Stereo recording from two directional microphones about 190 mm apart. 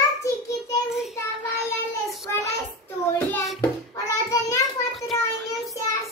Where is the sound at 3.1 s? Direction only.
15° left (ahead or behind).